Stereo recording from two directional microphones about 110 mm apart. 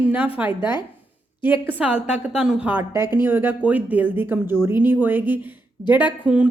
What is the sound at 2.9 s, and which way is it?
Speech, 20° right (ahead or behind).